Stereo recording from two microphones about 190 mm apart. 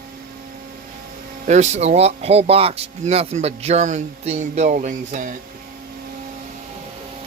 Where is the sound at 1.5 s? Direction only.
35° right (ahead or behind).